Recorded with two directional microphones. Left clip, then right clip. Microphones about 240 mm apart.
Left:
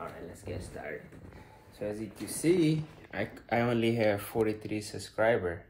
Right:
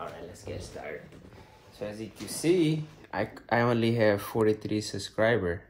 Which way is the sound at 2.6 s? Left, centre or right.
Right.